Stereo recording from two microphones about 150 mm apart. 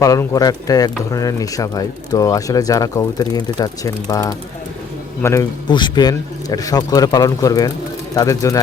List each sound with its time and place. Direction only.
0.0 s speech: 20° left (ahead or behind)
5.6 s speech: 30° left (ahead or behind)